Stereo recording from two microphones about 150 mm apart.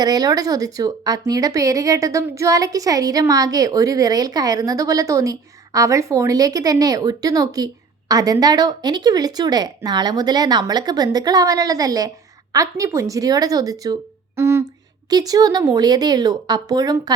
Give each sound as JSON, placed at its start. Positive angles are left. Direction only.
{"t": 0.0, "sound": "speech", "side_deg": -25}